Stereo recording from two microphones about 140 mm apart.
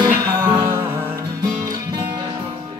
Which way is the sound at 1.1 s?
30° right (ahead or behind).